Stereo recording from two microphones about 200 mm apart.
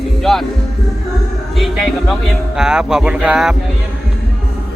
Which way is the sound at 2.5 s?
5° right (ahead or behind).